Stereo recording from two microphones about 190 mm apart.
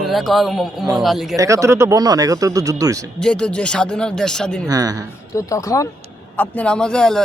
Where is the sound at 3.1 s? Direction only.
5° left (ahead or behind).